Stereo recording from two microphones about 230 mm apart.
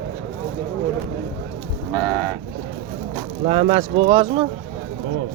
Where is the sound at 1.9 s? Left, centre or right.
Centre.